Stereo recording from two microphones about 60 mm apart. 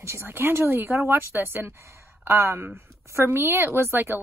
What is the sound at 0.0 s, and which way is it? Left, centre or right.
Speech, right.